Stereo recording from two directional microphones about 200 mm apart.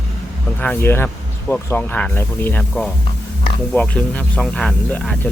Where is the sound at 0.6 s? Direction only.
10° left (ahead or behind).